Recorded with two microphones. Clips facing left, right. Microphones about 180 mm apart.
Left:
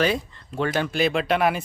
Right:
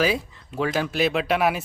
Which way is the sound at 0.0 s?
5° right (ahead or behind).